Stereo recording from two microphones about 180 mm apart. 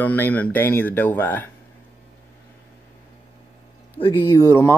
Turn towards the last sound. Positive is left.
turn(degrees=15)  # may be behind; listen again after turning